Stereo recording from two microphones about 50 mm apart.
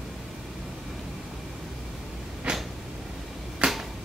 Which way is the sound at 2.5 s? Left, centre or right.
Centre.